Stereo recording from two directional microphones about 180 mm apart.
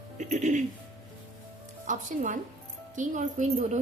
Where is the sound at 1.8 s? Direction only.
45° right (ahead or behind).